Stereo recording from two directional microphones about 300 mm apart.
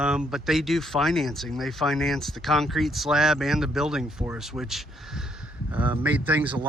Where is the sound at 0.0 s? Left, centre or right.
Centre.